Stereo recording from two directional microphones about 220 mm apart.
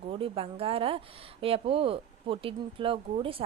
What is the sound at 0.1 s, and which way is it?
A woman's voice, 25° right (ahead or behind).